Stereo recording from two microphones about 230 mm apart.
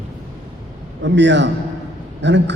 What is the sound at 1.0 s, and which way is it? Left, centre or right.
A woman's voice, right.